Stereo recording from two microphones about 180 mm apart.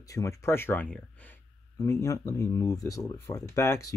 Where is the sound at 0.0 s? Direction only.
20° left (ahead or behind).